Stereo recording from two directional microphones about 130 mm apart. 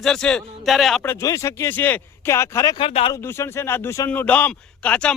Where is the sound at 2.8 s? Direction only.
45° left (ahead or behind).